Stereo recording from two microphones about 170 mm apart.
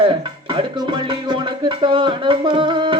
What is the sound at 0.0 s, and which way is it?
Speech, 30° right (ahead or behind).